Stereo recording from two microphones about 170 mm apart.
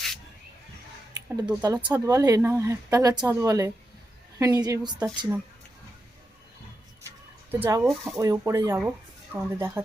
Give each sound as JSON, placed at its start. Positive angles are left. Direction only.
{"t": 1.5, "sound": "a woman's voice", "side_deg": -25}
{"t": 7.5, "sound": "speech", "side_deg": -10}
{"t": 7.9, "sound": "speech", "side_deg": 0}
{"t": 8.2, "sound": "speech", "side_deg": -20}